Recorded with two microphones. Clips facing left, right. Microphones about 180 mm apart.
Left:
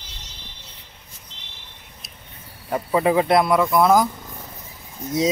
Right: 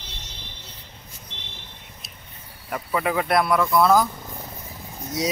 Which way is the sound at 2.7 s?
30° left (ahead or behind).